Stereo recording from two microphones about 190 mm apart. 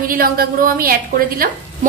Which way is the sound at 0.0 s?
50° right (ahead or behind).